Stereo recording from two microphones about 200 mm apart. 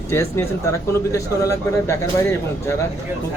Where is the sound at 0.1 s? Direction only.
10° left (ahead or behind).